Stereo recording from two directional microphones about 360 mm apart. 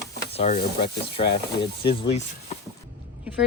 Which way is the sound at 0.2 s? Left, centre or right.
Centre.